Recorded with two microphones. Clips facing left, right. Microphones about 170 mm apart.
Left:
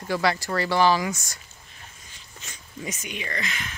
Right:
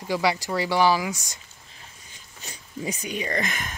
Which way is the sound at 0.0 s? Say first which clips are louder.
Even; 10° right (ahead or behind).